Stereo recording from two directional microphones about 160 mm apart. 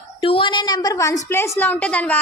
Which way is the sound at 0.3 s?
35° left (ahead or behind).